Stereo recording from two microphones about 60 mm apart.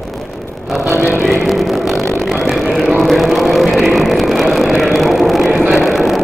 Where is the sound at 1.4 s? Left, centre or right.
Centre.